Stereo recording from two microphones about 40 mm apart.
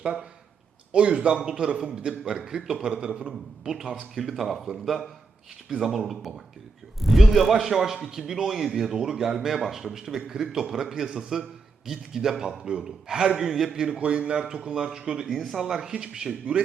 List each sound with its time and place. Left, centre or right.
0.9 s a man's voice: right
2.9 s a man's voice: right; by 13.7 s centre
13.7 s a man's voice: centre
14.0 s a man's voice: right
15.3 s speech: centre; by 16.6 s right